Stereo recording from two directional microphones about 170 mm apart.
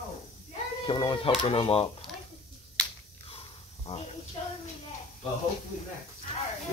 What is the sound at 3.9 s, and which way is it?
Speech, 40° left (ahead or behind).